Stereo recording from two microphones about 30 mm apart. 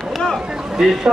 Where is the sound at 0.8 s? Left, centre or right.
Centre.